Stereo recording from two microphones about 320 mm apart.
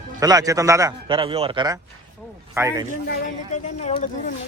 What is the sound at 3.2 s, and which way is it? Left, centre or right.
Speech, left.